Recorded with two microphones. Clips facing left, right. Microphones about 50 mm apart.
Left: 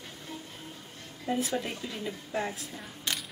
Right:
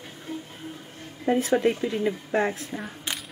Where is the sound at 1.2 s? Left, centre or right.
Right.